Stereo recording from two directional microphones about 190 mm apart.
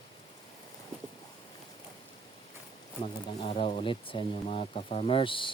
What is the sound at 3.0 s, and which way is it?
Speech, 30° left (ahead or behind).